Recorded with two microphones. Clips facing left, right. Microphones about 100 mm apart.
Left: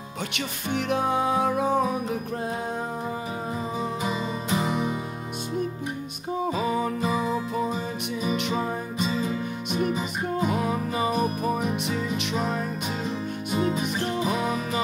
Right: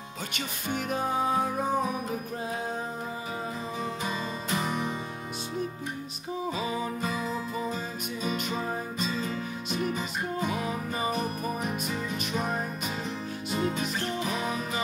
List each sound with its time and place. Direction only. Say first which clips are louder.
0.7 s music: left 5 dB; 70° left (ahead or behind)
4.0 s music: left 4 dB; 15° left (ahead or behind)
6.5 s music: left 6 dB; 55° left (ahead or behind)
7.0 s music: left 6 dB; 15° left (ahead or behind)
9.2 s music: left 5 dB; 10° left (ahead or behind)
10.5 s music: left 5 dB; 55° left (ahead or behind)
12.2 s music: left 3 dB; 70° left (ahead or behind)
13.6 s music: left 4 dB; 10° left (ahead or behind)
14.4 s music: left 4 dB; 60° left (ahead or behind)